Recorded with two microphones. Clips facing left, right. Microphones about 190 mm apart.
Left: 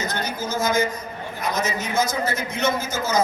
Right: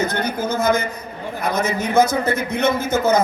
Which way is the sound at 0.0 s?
55° right (ahead or behind).